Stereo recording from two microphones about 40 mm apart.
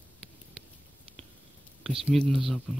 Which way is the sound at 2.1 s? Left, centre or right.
Centre.